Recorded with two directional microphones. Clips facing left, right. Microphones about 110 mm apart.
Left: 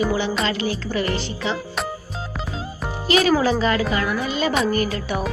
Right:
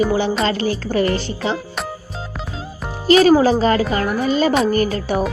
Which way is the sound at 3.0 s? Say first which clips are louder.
Right 6 dB; 35° right (ahead or behind).